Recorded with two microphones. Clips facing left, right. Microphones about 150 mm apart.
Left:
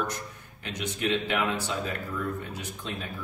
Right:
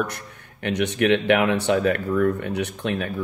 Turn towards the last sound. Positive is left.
turn(degrees=-70)  # may be behind; listen again after turning